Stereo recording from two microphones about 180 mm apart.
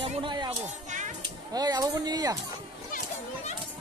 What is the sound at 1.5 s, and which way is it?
Speech, 20° right (ahead or behind).